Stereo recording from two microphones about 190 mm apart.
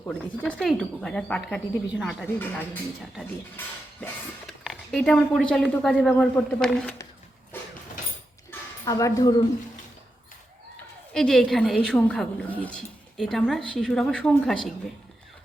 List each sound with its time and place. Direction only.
0.0 s speech: 5° left (ahead or behind)
4.0 s speech: centre (ahead or behind)
7.5 s a sound: 10° left (ahead or behind)
8.8 s speech: 15° left (ahead or behind)
11.1 s speech: centre (ahead or behind)